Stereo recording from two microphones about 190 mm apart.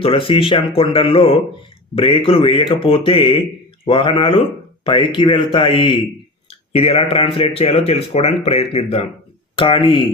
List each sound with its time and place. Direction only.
0.0 s speech: 30° left (ahead or behind)